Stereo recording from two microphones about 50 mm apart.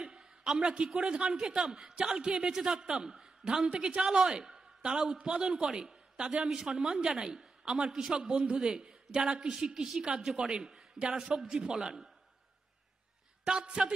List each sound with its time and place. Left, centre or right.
0.0 s a man's voice: centre
13.4 s a sound: centre
13.7 s a man's voice: centre